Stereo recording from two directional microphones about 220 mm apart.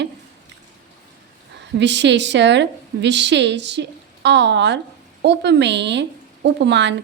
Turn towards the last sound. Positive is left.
turn(degrees=-55)  # may be behind; listen again after turning